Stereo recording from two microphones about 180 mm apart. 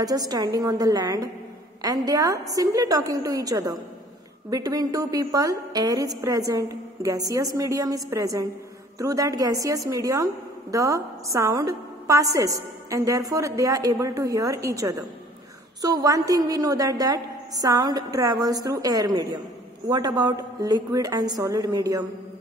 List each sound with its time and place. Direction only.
0.0 s a woman's voice: 20° right (ahead or behind)